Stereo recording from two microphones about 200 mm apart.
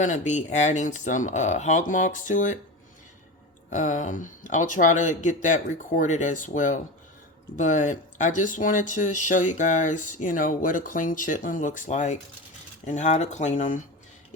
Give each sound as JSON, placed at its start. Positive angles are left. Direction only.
{"t": 0.0, "sound": "speech", "side_deg": 40}
{"t": 3.7, "sound": "speech", "side_deg": 40}